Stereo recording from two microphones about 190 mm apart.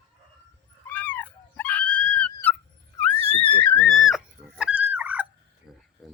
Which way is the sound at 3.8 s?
Centre (ahead or behind).